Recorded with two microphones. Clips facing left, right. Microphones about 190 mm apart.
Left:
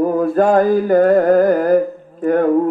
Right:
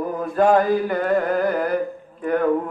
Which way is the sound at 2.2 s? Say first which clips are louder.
Left 6 dB; 45° left (ahead or behind).